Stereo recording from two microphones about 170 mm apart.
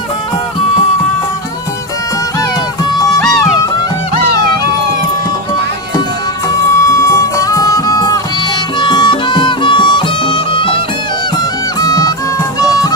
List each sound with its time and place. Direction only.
3.2 s music: centre (ahead or behind)
6.7 s music: 15° left (ahead or behind)
11.8 s music: 20° left (ahead or behind)